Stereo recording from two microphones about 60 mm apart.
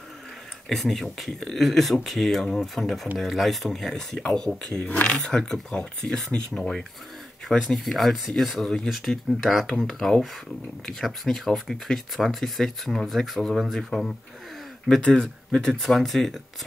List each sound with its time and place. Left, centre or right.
0.7 s speech: centre
4.8 s speech: left
5.3 s speech: centre
15.1 s speech: centre